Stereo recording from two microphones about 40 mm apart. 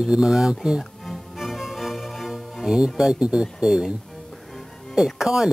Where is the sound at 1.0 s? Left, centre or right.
Centre.